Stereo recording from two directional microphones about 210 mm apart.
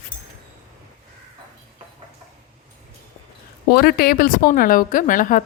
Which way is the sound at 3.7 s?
45° left (ahead or behind).